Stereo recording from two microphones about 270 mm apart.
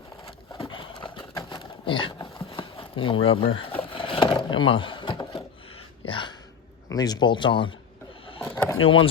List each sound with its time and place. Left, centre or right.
0.3 s a sound: centre
6.8 s speech: centre
8.4 s vehicle: centre
8.8 s speech: centre